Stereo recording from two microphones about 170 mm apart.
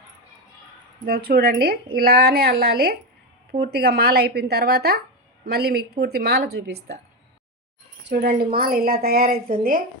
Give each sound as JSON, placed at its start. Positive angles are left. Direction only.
{"t": 1.0, "sound": "a woman's voice", "side_deg": -65}
{"t": 8.1, "sound": "a woman's voice", "side_deg": -65}